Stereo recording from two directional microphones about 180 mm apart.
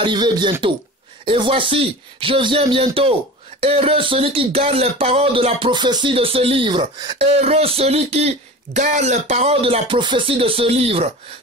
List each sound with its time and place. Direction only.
0.0 s a man's voice: 25° right (ahead or behind)